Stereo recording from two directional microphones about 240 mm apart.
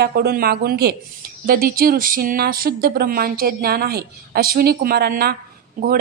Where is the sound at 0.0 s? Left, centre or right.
Right.